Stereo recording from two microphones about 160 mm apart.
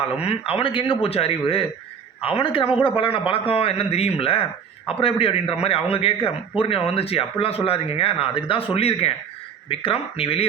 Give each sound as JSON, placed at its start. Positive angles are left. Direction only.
{"t": 0.0, "sound": "speech", "side_deg": 40}